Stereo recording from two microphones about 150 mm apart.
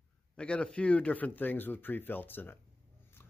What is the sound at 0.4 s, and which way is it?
Mantra, 5° left (ahead or behind).